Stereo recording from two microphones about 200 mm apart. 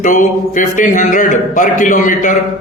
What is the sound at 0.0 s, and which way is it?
A man's voice, 40° left (ahead or behind).